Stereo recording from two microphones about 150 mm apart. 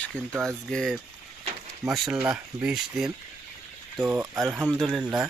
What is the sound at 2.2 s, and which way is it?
Speech, 10° right (ahead or behind).